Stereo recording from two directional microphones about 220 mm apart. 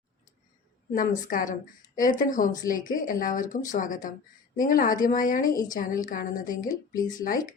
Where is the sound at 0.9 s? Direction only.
40° left (ahead or behind).